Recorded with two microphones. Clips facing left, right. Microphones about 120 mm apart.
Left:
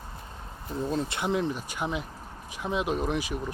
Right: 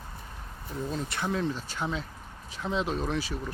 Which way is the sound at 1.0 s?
20° left (ahead or behind).